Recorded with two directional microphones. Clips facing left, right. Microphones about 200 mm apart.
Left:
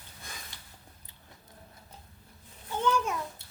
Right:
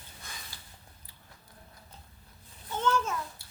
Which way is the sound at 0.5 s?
20° left (ahead or behind).